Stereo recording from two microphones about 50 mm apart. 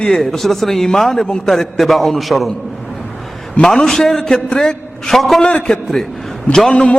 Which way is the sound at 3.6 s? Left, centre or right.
Centre.